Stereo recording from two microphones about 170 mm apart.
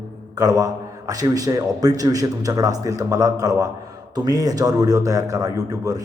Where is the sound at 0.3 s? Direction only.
20° right (ahead or behind).